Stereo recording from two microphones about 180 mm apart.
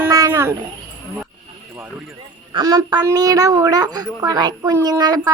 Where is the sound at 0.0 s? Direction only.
15° right (ahead or behind).